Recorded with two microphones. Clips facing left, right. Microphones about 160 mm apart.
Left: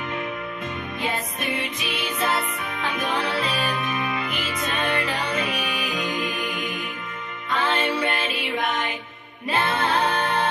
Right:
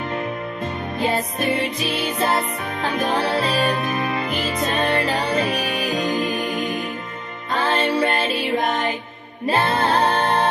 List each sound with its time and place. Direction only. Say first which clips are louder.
0.9 s music: right 8 dB; 35° right (ahead or behind)